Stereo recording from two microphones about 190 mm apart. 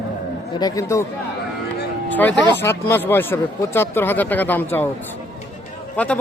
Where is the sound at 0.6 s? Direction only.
15° left (ahead or behind).